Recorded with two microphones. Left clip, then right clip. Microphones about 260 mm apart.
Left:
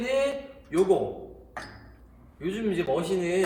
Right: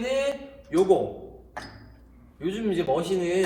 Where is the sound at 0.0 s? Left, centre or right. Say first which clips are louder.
Even; centre.